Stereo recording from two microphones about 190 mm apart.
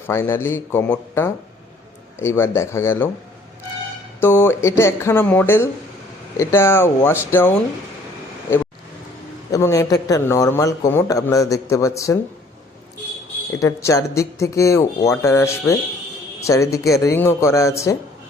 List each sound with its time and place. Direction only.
0.1 s speech: 15° left (ahead or behind)
4.2 s speech: 10° left (ahead or behind)
9.5 s speech: 15° left (ahead or behind)
13.6 s speech: 15° left (ahead or behind)